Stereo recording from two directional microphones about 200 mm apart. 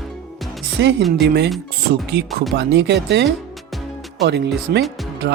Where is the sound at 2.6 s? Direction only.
60° right (ahead or behind).